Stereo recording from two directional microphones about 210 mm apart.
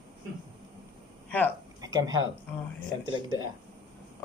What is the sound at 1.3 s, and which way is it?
Speech, 10° left (ahead or behind).